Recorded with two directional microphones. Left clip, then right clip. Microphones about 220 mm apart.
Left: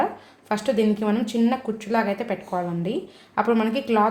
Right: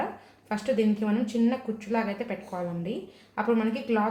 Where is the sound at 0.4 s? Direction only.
40° left (ahead or behind).